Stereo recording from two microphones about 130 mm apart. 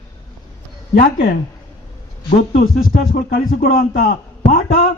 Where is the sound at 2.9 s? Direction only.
90° left.